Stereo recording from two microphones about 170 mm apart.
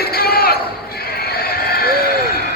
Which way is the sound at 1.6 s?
65° left (ahead or behind).